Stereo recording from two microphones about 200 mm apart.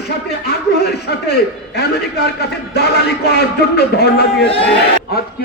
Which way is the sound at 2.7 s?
55° left (ahead or behind).